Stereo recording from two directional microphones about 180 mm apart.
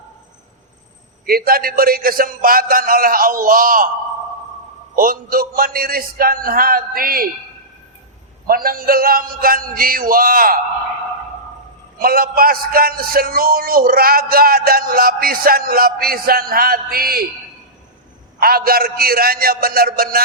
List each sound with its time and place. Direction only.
1.3 s a man's voice: 55° right (ahead or behind)
4.9 s a man's voice: 50° right (ahead or behind)
8.4 s a man's voice: 55° right (ahead or behind)
11.9 s a man's voice: 55° right (ahead or behind)
18.3 s a man's voice: 55° right (ahead or behind)